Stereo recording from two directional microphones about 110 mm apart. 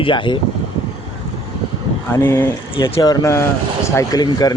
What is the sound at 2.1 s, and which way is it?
Speech, 25° left (ahead or behind).